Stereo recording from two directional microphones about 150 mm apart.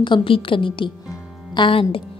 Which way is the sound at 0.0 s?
35° left (ahead or behind).